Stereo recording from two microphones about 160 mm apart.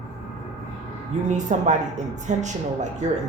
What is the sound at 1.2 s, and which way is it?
Speech, 50° right (ahead or behind).